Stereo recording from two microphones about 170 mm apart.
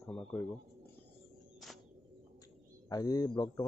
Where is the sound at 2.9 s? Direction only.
20° left (ahead or behind).